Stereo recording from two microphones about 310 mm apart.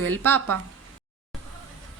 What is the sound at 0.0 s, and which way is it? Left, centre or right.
Speech, right.